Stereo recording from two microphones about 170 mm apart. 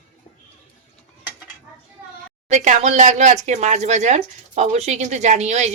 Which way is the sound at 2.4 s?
45° right (ahead or behind).